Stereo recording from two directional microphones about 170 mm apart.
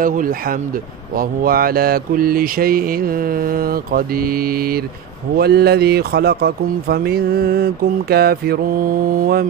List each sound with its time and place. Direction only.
0.0 s speech: 55° right (ahead or behind)